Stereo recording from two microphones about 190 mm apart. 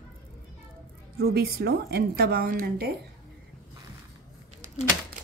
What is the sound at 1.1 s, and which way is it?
A woman's voice, 55° right (ahead or behind).